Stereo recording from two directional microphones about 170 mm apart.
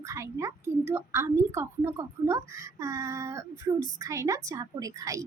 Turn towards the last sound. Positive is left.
turn(degrees=-20)  # may be behind; listen again after turning